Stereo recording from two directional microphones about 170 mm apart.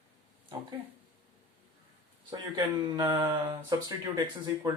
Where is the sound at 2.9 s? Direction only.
20° right (ahead or behind).